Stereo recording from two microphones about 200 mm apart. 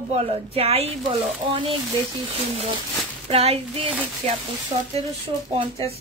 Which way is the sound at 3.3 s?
30° right (ahead or behind).